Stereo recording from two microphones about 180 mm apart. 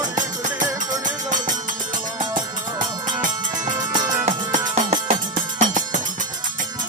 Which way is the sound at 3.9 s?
25° right (ahead or behind).